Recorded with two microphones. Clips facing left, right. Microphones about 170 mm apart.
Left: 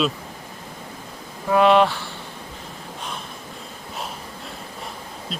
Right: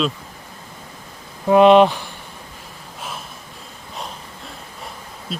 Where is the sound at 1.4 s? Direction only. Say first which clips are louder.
Right 5 dB; 20° right (ahead or behind).